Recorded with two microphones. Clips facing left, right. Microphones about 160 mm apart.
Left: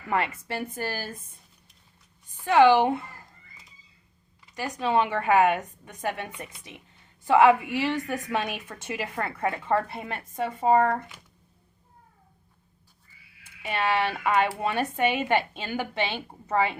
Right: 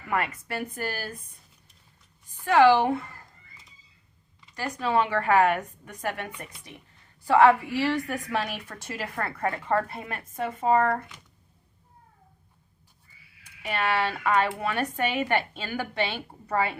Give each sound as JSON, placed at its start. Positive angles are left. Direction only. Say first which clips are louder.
{"t": 0.1, "sound": "a woman's voice", "louder": "left 1 dB", "side_deg": 25}
{"t": 2.4, "sound": "a woman's voice", "louder": "left 1 dB", "side_deg": 20}
{"t": 4.5, "sound": "a woman's voice", "louder": "left 1 dB", "side_deg": 20}
{"t": 13.7, "sound": "a woman's voice", "louder": "left 1 dB", "side_deg": 20}